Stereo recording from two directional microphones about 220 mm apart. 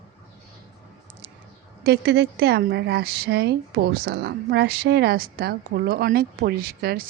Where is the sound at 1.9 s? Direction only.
50° right (ahead or behind).